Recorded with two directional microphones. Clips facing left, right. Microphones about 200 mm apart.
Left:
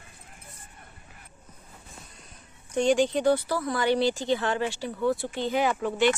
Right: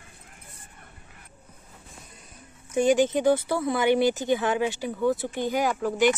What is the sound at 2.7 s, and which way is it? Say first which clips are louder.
Speech: right 2 dB; 5° right (ahead or behind).